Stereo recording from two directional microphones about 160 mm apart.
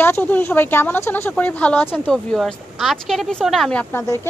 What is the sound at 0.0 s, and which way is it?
Speech, 10° left (ahead or behind).